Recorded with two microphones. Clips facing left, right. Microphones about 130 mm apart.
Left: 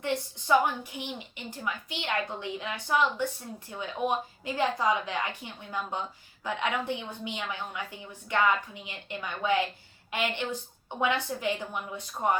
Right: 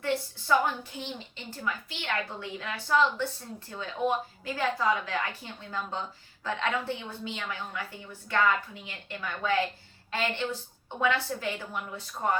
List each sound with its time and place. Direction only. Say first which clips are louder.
0.0 s a woman's voice: right 1 dB; 20° left (ahead or behind)